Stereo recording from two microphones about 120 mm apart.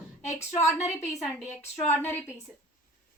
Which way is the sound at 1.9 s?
15° left (ahead or behind).